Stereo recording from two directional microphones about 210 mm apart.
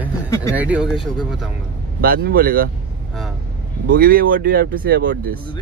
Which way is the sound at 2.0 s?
45° right (ahead or behind).